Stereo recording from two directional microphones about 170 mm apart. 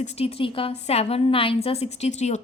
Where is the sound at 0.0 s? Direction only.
35° left (ahead or behind).